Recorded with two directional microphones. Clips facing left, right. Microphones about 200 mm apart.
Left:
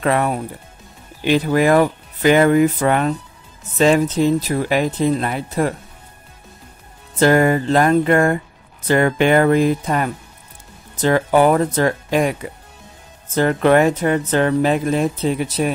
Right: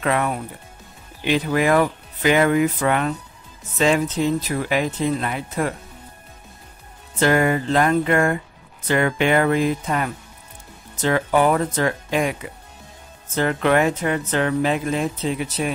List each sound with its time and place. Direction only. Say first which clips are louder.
0.0 s speech: left 4 dB; 40° left (ahead or behind)
7.2 s speech: left 4 dB; 40° left (ahead or behind)